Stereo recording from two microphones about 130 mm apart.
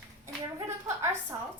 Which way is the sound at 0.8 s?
20° right (ahead or behind).